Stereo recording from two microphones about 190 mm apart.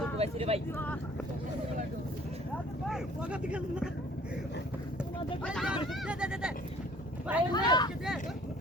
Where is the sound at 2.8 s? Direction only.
5° right (ahead or behind).